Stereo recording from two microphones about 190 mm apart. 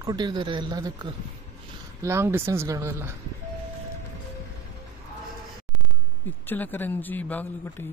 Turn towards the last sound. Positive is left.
turn(degrees=10)  # may be behind; listen again after turning